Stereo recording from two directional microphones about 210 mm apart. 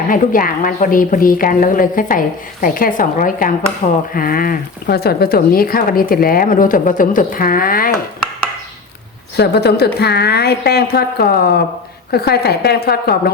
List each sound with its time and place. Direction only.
0.1 s a woman's voice: 40° left (ahead or behind)
9.3 s speech: 50° left (ahead or behind)